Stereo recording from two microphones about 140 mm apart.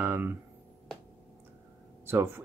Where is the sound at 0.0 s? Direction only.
15° right (ahead or behind).